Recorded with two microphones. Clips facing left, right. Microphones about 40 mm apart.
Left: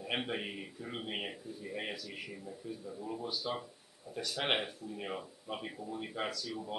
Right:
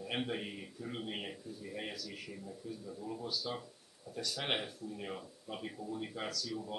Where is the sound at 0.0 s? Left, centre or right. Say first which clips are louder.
Left 1 dB; left.